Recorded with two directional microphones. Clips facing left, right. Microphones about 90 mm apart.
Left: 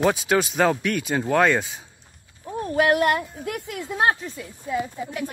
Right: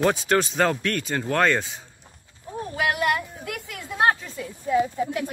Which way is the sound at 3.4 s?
25° left (ahead or behind).